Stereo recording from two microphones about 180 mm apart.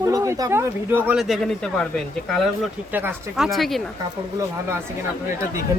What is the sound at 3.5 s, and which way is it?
Speech, centre (ahead or behind).